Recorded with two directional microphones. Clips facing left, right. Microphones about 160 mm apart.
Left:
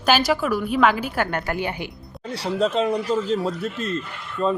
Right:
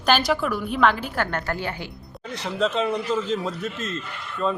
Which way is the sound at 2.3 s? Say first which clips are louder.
Left 3 dB; 35° left (ahead or behind).